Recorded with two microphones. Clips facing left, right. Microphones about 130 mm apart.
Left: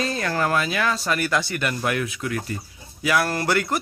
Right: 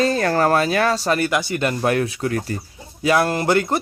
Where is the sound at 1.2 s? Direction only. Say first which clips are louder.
Right 3 dB; 20° right (ahead or behind); by 2.5 s 35° right (ahead or behind).